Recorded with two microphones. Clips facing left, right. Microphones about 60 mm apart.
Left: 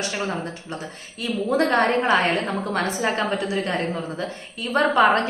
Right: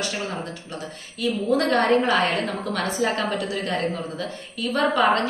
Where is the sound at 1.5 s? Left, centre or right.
Left.